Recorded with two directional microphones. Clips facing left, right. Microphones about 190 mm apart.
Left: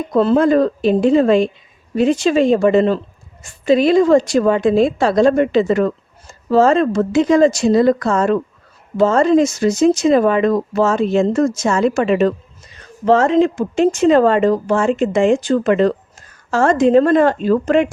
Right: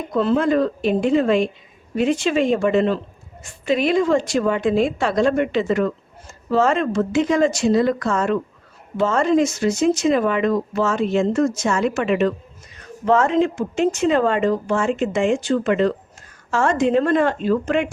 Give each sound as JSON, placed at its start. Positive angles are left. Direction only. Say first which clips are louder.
{"t": 0.1, "sound": "a woman's voice", "louder": "left 5 dB", "side_deg": 35}